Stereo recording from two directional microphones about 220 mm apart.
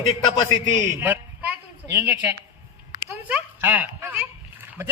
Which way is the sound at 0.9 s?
10° right (ahead or behind).